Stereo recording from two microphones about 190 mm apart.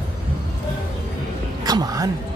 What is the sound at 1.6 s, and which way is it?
Music, 20° right (ahead or behind).